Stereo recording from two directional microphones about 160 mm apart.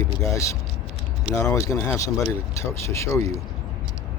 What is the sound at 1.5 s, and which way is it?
Speech, 20° left (ahead or behind).